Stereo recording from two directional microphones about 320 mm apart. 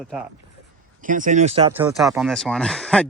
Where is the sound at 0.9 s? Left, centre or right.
Right.